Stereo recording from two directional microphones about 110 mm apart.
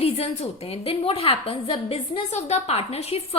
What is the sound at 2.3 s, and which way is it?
A woman's voice, 90° left.